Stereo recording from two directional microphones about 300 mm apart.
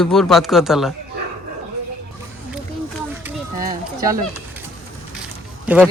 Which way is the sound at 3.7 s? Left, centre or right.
Centre.